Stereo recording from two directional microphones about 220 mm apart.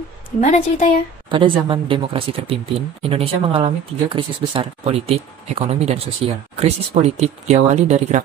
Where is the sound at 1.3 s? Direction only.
20° right (ahead or behind).